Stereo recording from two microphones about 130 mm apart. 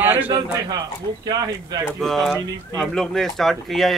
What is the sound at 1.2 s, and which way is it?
Speech, 30° right (ahead or behind).